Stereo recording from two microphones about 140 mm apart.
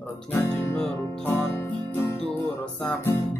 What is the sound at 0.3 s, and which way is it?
Music, 15° left (ahead or behind).